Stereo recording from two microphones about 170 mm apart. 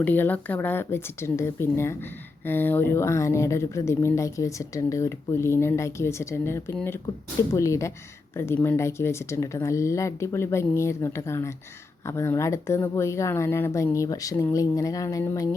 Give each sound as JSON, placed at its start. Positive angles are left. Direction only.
{"t": 0.0, "sound": "speech", "side_deg": 10}